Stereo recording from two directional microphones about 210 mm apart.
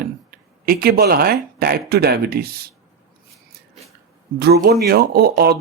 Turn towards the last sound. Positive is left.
turn(degrees=-50)  # may be behind; listen again after turning